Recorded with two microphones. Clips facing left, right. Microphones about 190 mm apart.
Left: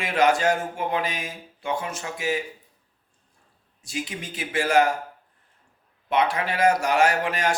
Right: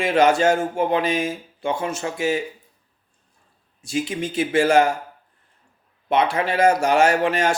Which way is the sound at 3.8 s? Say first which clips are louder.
Right 8 dB; 30° right (ahead or behind).